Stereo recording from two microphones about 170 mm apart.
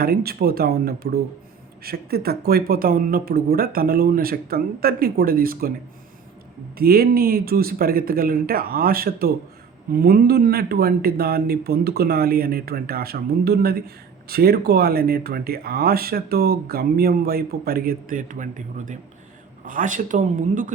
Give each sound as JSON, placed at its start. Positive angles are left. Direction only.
{"t": 0.0, "sound": "speech", "side_deg": -65}
{"t": 6.7, "sound": "speech", "side_deg": -65}